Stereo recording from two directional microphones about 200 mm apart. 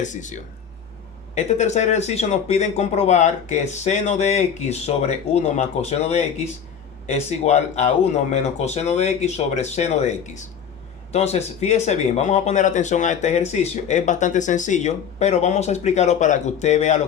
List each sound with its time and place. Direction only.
0.0 s speech: 40° left (ahead or behind)